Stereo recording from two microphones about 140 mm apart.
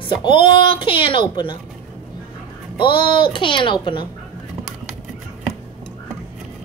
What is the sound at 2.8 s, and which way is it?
A woman's voice, 35° left (ahead or behind).